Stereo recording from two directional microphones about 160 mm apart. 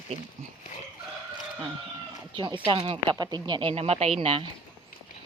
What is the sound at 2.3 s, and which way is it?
A woman's voice, 30° right (ahead or behind).